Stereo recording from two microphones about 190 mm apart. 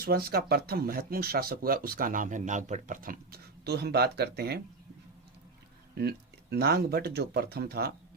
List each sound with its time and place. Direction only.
0.0 s speech: 55° right (ahead or behind)
5.9 s speech: 60° right (ahead or behind)